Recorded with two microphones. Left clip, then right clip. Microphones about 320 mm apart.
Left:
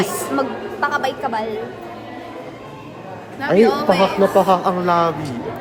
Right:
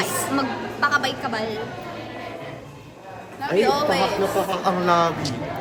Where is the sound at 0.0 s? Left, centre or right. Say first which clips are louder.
Left 3 dB; centre.